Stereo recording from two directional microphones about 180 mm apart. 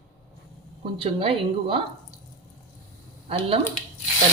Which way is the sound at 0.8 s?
30° right (ahead or behind).